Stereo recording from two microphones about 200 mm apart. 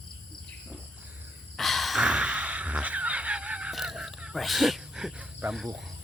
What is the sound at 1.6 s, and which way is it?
Gasp, centre (ahead or behind).